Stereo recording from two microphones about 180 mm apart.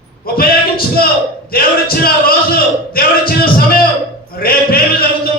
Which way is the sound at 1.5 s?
55° left (ahead or behind).